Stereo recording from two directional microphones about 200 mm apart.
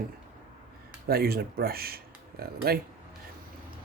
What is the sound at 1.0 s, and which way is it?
Speech, 50° right (ahead or behind).